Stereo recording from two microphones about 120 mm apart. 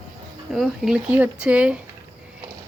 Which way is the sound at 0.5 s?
Centre (ahead or behind).